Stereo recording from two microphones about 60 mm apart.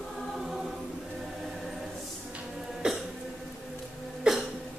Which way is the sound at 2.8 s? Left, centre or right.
Centre.